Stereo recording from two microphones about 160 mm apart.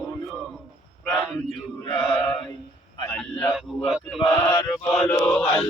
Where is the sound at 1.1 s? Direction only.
Centre (ahead or behind).